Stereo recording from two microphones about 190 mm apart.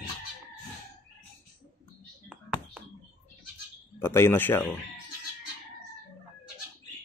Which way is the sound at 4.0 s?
10° left (ahead or behind).